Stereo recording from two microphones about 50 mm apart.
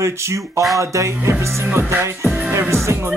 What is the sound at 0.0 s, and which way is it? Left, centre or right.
Speech, right.